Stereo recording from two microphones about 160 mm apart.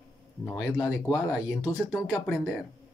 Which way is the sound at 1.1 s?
5° right (ahead or behind).